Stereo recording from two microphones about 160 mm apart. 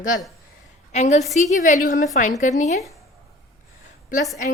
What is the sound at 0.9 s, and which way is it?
A woman's voice, 45° left (ahead or behind).